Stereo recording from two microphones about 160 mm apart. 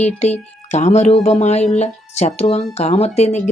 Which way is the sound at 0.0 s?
45° left (ahead or behind).